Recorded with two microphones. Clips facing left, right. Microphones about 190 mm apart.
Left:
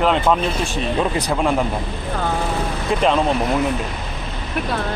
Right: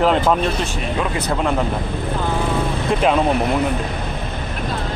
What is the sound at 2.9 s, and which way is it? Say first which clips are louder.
Speech: even; 5° right (ahead or behind).